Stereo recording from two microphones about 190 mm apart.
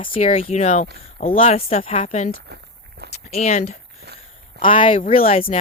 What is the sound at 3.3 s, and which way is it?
Speech, 35° left (ahead or behind).